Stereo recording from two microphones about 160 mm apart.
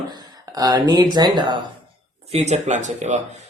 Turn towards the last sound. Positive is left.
turn(degrees=-45)  # may be behind; listen again after turning